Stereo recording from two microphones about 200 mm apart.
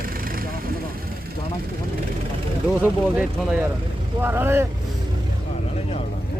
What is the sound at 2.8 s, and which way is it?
Speech, 5° right (ahead or behind).